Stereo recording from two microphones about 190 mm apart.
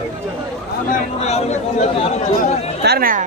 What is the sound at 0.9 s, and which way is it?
Speech, 35° left (ahead or behind).